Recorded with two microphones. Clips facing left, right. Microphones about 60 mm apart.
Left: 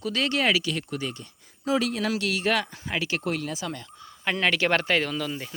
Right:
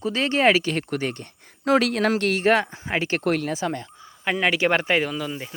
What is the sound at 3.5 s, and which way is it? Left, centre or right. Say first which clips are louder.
Speech: right 7 dB; right.